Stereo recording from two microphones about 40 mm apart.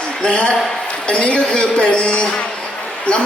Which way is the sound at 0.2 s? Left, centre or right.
Left.